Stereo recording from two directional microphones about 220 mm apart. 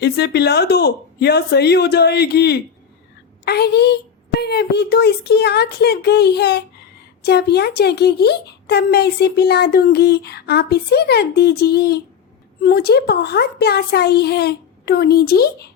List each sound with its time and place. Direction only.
0.0 s speech: 50° left (ahead or behind)